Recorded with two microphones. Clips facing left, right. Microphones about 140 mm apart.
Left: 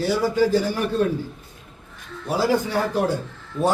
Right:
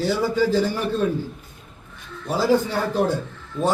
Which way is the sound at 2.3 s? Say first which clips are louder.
Right 1 dB; 10° left (ahead or behind).